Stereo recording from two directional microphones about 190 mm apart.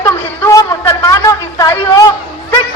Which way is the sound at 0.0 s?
15° left (ahead or behind).